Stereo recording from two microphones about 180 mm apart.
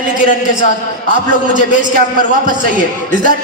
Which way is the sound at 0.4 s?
45° left (ahead or behind).